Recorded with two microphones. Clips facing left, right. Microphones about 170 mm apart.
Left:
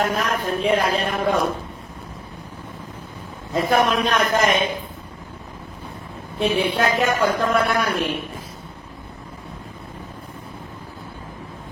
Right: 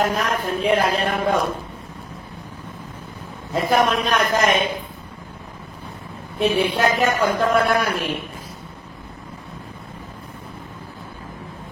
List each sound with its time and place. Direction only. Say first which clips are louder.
0.0 s speech: right 1 dB; centre (ahead or behind)
3.5 s speech: even; centre (ahead or behind)
6.4 s speech: right 1 dB; centre (ahead or behind)